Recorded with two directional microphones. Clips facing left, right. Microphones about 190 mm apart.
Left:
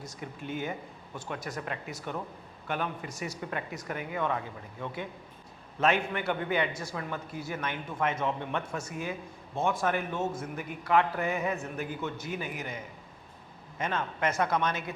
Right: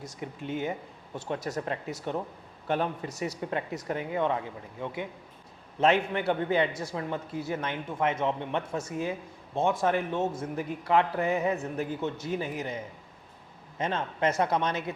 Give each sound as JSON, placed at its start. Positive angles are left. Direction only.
{"t": 0.2, "sound": "speech", "side_deg": -25}
{"t": 1.5, "sound": "speech", "side_deg": -35}